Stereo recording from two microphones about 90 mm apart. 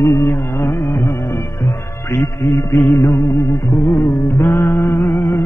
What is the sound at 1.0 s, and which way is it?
Music, 30° left (ahead or behind).